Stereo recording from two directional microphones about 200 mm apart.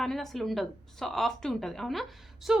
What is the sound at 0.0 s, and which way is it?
A woman's voice, centre (ahead or behind).